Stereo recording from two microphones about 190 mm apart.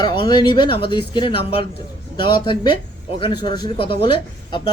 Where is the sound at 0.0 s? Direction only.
25° left (ahead or behind).